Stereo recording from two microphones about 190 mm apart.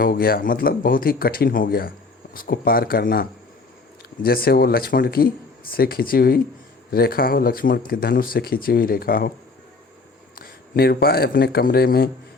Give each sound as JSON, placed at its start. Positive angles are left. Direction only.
{"t": 0.0, "sound": "speech", "side_deg": 50}
{"t": 10.3, "sound": "speech", "side_deg": 55}